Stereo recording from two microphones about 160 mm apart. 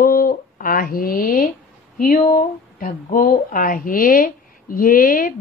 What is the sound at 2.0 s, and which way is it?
Speech, 65° left (ahead or behind).